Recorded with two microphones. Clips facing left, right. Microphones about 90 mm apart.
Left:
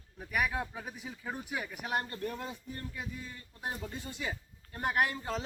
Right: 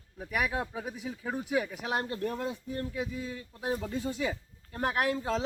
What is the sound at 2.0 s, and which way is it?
Speech, 90° right.